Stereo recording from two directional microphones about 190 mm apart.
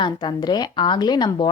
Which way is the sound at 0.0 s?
25° left (ahead or behind).